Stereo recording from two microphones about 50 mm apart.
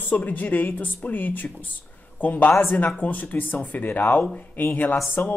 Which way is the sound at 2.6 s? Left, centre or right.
Left.